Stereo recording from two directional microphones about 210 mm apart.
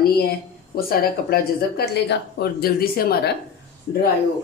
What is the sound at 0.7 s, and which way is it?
Speech, 45° left (ahead or behind).